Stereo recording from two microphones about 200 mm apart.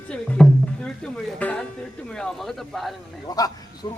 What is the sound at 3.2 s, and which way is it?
Speech, 20° left (ahead or behind).